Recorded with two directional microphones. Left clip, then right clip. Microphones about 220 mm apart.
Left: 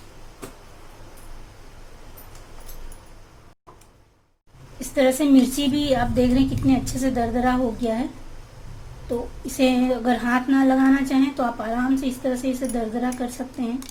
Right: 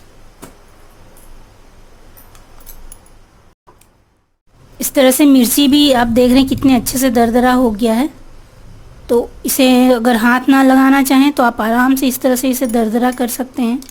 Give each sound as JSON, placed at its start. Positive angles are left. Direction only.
{"t": 4.9, "sound": "speech", "side_deg": -45}
{"t": 9.6, "sound": "speech", "side_deg": -50}